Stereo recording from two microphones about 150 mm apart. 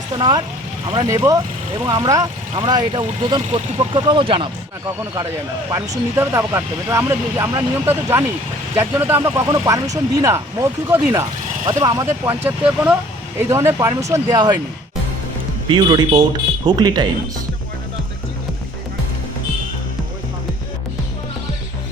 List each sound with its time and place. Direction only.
0.1 s speech: 30° right (ahead or behind)
5.7 s speech: 20° right (ahead or behind)
15.7 s speech: 30° right (ahead or behind)